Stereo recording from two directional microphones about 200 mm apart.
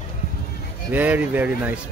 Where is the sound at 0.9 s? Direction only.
10° right (ahead or behind).